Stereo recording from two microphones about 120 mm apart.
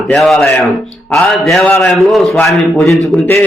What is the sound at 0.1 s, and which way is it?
Speech, centre (ahead or behind).